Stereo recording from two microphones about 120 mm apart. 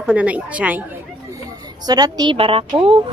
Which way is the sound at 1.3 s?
35° right (ahead or behind).